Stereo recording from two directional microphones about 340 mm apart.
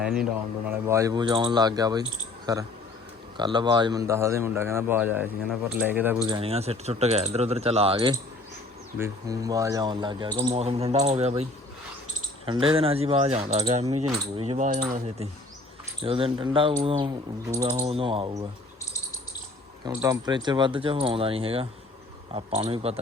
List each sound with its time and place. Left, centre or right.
0.0 s speech: centre
12.5 s speech: centre
19.8 s speech: centre